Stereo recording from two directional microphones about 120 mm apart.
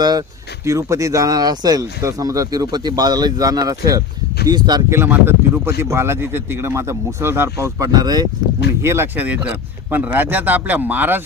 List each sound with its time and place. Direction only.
0.0 s speech: 35° right (ahead or behind)
4.9 s speech: 20° right (ahead or behind)
8.8 s speech: 20° right (ahead or behind)